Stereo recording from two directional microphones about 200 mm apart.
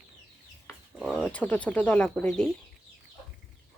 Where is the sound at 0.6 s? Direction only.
Centre (ahead or behind).